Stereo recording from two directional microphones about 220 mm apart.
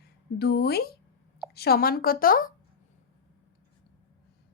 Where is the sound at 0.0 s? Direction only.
45° left (ahead or behind).